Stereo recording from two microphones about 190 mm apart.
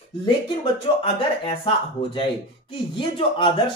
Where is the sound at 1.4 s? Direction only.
25° left (ahead or behind).